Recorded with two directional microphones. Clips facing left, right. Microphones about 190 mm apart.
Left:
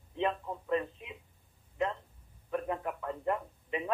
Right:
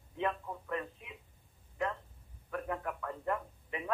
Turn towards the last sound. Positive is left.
turn(degrees=20)  # may be behind; listen again after turning